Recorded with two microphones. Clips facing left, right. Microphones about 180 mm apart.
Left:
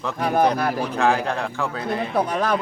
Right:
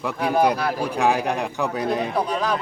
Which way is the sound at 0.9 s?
15° right (ahead or behind).